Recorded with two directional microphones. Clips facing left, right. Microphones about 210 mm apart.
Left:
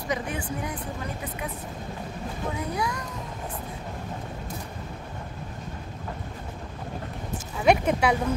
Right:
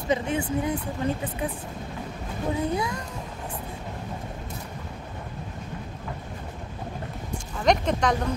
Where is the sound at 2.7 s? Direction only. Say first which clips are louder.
Right 2 dB; 25° right (ahead or behind).